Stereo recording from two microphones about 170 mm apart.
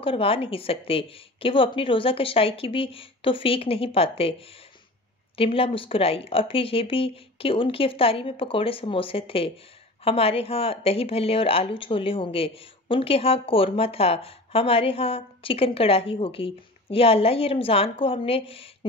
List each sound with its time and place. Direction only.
0.0 s speech: 35° left (ahead or behind)
5.4 s speech: 35° left (ahead or behind)